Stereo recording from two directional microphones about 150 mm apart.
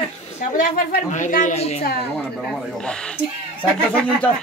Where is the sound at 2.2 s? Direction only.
5° left (ahead or behind).